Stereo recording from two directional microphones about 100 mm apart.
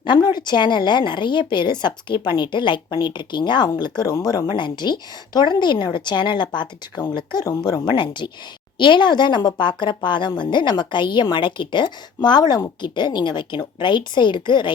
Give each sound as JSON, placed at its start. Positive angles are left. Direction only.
{"t": 0.0, "sound": "a woman's voice", "side_deg": 50}